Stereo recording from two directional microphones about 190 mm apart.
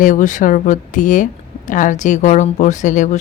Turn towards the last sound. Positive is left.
turn(degrees=40)  # may be behind; listen again after turning